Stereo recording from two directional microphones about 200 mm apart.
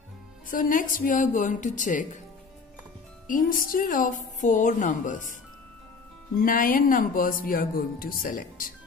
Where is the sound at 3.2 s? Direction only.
45° left (ahead or behind).